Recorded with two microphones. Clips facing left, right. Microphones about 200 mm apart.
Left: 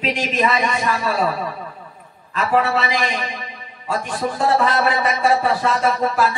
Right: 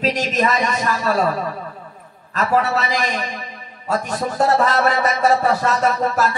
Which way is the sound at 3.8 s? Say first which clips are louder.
Right 2 dB; 40° right (ahead or behind).